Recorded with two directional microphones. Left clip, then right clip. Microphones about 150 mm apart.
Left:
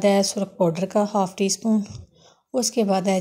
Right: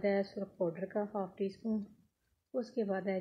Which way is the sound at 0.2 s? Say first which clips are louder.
Left 14 dB; 20° left (ahead or behind).